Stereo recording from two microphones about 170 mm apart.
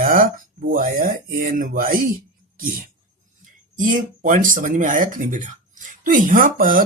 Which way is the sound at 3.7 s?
50° right (ahead or behind).